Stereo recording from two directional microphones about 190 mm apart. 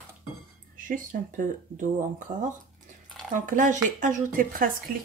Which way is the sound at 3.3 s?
40° right (ahead or behind).